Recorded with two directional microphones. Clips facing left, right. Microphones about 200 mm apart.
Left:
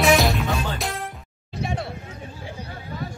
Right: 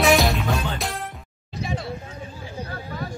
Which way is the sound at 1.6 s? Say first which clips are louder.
Left 1 dB; 60° left (ahead or behind).